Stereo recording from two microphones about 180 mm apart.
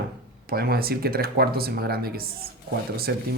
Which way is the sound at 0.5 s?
60° right (ahead or behind).